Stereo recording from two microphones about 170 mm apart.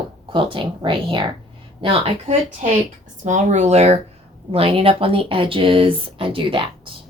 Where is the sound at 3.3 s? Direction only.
45° right (ahead or behind).